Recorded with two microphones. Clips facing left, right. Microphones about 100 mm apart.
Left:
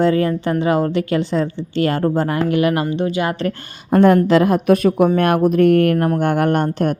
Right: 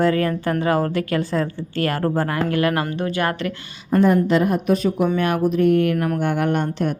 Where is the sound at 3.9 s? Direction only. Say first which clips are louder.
Left 4 dB; 70° left (ahead or behind).